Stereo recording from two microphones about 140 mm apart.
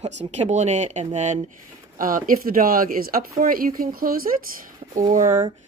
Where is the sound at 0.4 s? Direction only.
55° right (ahead or behind).